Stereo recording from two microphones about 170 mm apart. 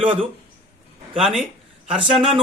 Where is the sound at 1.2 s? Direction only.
Centre (ahead or behind).